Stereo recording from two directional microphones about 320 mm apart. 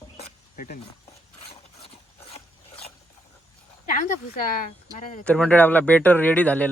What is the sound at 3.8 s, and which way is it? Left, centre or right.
Speech, left.